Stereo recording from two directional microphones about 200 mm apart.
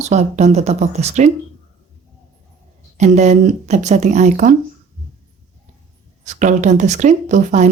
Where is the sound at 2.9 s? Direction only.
35° right (ahead or behind).